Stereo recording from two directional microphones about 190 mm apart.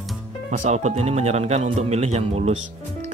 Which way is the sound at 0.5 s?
35° right (ahead or behind).